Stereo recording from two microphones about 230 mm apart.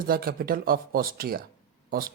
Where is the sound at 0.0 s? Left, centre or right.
Right.